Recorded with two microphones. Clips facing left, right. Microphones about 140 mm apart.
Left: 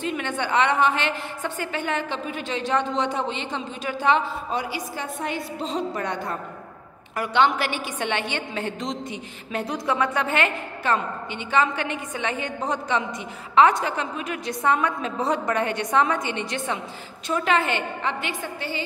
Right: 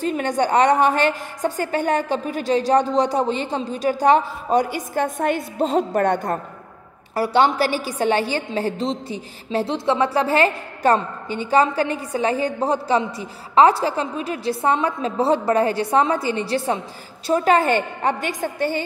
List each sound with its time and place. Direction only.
0.0 s a woman's voice: 40° right (ahead or behind)
7.2 s a woman's voice: 35° right (ahead or behind)